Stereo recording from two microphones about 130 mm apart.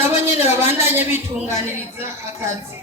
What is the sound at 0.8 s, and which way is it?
Speech, 15° right (ahead or behind).